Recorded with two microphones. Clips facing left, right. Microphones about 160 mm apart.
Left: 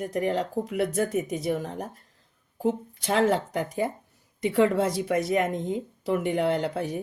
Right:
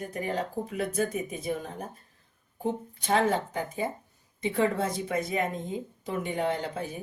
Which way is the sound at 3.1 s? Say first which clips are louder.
Left 2 dB; 85° left.